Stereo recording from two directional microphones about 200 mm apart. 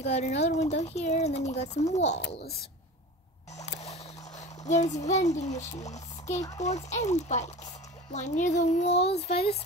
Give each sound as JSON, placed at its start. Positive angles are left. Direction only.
{"t": 0.0, "sound": "speech", "side_deg": 35}
{"t": 4.6, "sound": "speech", "side_deg": 35}